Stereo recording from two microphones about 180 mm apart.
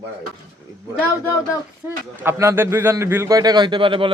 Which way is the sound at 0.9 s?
10° right (ahead or behind).